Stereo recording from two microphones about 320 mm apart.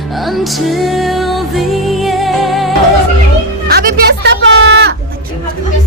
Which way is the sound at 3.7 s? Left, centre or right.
Right.